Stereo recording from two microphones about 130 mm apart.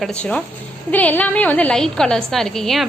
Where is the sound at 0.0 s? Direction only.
10° left (ahead or behind).